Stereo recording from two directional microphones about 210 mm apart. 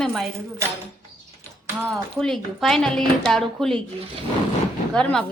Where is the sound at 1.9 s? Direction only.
Centre (ahead or behind).